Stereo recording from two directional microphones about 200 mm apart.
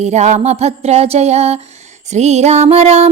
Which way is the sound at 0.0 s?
35° right (ahead or behind).